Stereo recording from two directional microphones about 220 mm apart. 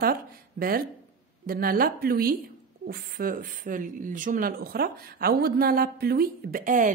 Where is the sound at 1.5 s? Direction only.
40° right (ahead or behind).